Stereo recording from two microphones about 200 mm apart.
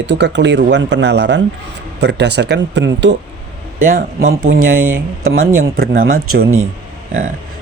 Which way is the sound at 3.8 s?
45° right (ahead or behind).